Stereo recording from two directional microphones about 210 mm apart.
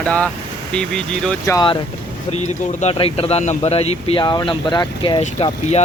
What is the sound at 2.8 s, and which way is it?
Speech, 30° left (ahead or behind).